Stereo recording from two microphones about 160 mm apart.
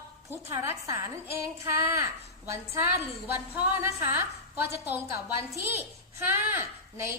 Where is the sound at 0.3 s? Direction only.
15° right (ahead or behind).